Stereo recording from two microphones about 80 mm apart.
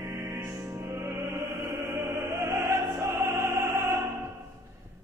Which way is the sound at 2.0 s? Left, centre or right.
Right.